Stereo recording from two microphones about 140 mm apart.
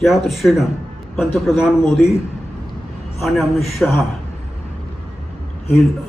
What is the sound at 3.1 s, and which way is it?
Speech, centre (ahead or behind).